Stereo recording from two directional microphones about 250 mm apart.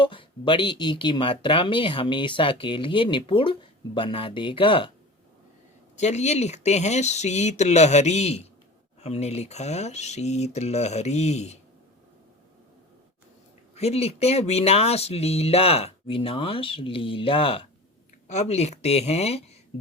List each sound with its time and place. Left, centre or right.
0.0 s speech: centre
6.0 s speech: left
13.7 s speech: left